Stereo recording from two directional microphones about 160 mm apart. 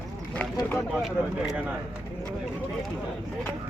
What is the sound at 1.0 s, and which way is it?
Speech, centre (ahead or behind).